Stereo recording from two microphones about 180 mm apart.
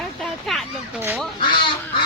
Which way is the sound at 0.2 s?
Centre (ahead or behind).